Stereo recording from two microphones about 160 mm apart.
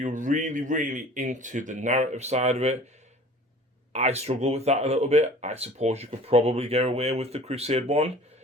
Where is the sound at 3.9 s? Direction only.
45° right (ahead or behind).